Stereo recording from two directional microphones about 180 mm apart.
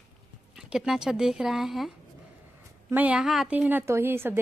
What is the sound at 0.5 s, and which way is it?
Speech, 5° right (ahead or behind).